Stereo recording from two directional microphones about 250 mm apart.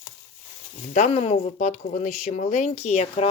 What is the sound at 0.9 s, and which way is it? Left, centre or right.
Speech, left.